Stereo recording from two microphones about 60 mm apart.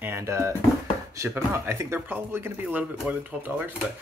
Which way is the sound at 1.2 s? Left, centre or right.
Right.